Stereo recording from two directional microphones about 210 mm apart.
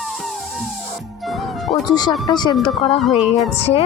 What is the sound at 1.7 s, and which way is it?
Music, 20° left (ahead or behind).